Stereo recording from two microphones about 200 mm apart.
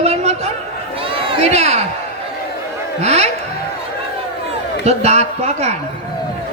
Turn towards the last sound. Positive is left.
turn(degrees=-35)  # may be behind; listen again after turning